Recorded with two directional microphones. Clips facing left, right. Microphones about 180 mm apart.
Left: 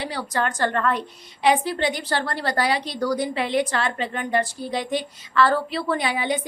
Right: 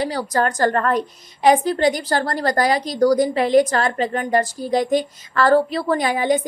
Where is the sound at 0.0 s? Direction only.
40° right (ahead or behind).